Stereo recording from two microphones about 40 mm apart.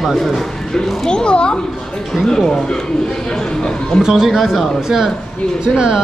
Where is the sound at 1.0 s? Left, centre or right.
Left.